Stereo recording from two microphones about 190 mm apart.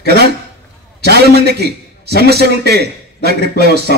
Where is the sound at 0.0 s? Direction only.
60° right (ahead or behind).